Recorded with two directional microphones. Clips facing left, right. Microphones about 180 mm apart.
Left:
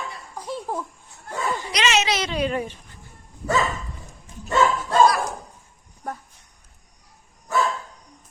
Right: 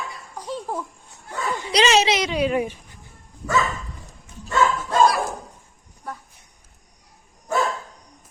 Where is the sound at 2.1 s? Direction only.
10° right (ahead or behind).